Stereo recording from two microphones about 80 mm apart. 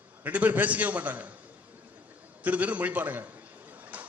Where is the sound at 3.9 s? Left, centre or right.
Centre.